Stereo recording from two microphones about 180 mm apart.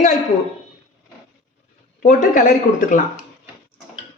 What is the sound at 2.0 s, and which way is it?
Speech, 50° left (ahead or behind).